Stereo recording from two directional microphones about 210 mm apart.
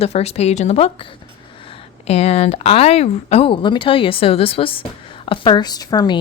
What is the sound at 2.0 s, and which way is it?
Speech, 30° left (ahead or behind).